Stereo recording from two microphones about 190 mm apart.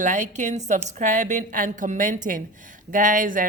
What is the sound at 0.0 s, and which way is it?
Speech, 40° right (ahead or behind).